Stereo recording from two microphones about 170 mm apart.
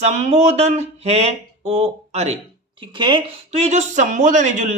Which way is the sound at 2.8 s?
30° right (ahead or behind).